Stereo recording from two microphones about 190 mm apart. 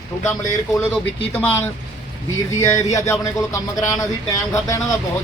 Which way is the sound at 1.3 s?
10° left (ahead or behind).